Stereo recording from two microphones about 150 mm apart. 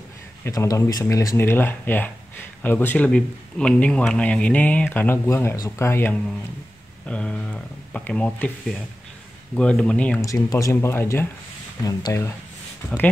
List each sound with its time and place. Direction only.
0.4 s speech: 20° left (ahead or behind)
10.2 s speech: 20° left (ahead or behind)